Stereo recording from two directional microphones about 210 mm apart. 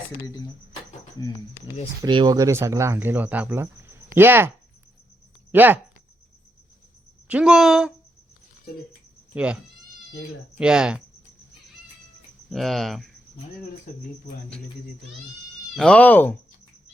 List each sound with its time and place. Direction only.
2.0 s speech: 20° right (ahead or behind)
7.3 s speech: 5° right (ahead or behind)
9.3 s speech: 5° right (ahead or behind)
10.6 s speech: 5° right (ahead or behind)
12.5 s speech: centre (ahead or behind)
15.7 s speech: 5° left (ahead or behind)